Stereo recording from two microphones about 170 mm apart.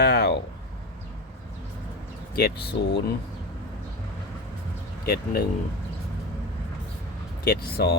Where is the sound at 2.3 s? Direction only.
65° left (ahead or behind).